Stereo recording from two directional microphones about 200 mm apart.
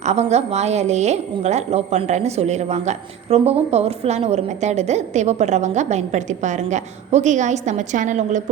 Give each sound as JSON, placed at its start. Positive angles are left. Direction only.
{"t": 0.0, "sound": "a woman's voice", "side_deg": -35}